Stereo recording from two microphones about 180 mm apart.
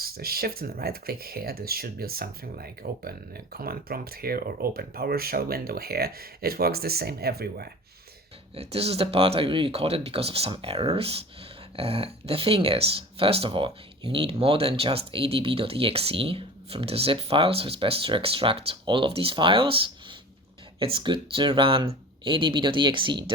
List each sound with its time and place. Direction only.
0.0 s speech: 60° right (ahead or behind)
8.5 s speech: 35° right (ahead or behind)